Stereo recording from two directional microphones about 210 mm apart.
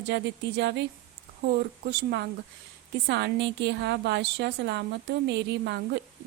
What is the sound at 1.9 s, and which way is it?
A woman's voice, 50° right (ahead or behind).